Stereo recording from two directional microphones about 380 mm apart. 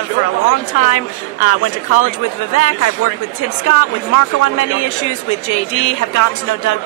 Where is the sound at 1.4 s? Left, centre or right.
Left.